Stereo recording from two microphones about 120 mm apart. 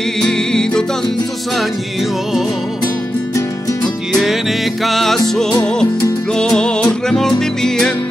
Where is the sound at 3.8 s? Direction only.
Centre (ahead or behind).